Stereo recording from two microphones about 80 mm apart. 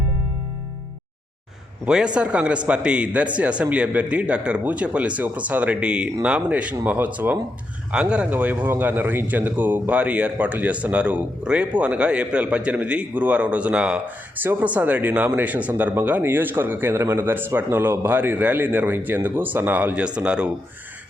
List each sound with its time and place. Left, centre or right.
1.8 s speech: centre